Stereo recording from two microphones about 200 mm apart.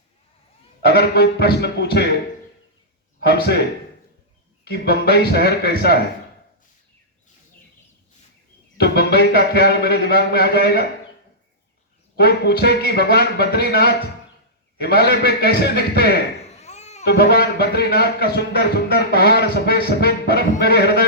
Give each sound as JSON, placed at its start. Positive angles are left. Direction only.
{"t": 0.9, "sound": "a man's voice", "side_deg": 55}
{"t": 3.2, "sound": "a man's voice", "side_deg": 55}
{"t": 8.8, "sound": "a man's voice", "side_deg": 55}
{"t": 12.1, "sound": "a man's voice", "side_deg": 55}
{"t": 16.5, "sound": "a sound", "side_deg": 35}
{"t": 17.1, "sound": "a man's voice", "side_deg": 55}